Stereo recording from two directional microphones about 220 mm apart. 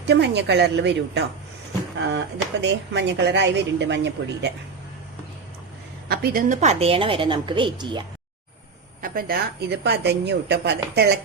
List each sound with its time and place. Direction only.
0.0 s speech: 50° right (ahead or behind)
6.1 s a woman's voice: 40° right (ahead or behind); by 8.0 s 20° right (ahead or behind)
9.0 s speech: 40° right (ahead or behind)